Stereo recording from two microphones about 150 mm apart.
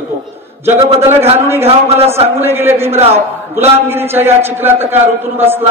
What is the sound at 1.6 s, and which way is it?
Speech, 40° right (ahead or behind).